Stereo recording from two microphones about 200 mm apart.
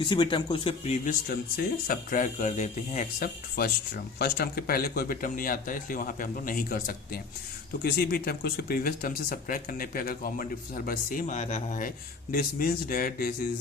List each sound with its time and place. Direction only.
0.0 s speech: 25° left (ahead or behind)
1.5 s speech: 45° left (ahead or behind)